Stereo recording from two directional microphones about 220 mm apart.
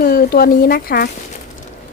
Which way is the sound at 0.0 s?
40° left (ahead or behind).